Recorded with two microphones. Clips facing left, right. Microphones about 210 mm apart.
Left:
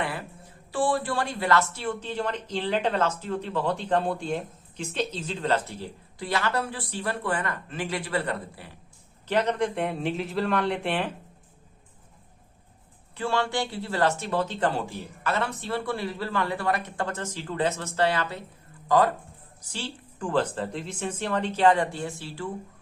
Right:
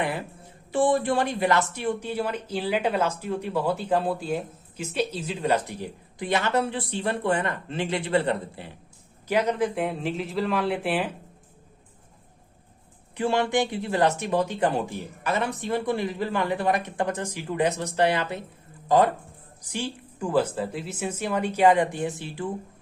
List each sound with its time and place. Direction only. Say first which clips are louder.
0.0 s music: right 3 dB; 20° right (ahead or behind)
0.7 s speech: right 4 dB; 20° right (ahead or behind)
9.2 s a man's voice: right 1 dB; 10° right (ahead or behind)
13.1 s speech: right 4 dB; 20° right (ahead or behind)